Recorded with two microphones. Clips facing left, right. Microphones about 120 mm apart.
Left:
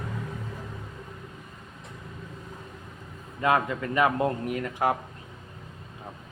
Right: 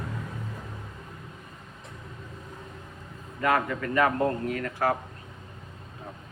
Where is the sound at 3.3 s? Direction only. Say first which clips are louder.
Left 1 dB; 20° left (ahead or behind).